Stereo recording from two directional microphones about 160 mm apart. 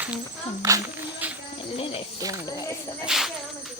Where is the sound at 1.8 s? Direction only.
35° left (ahead or behind).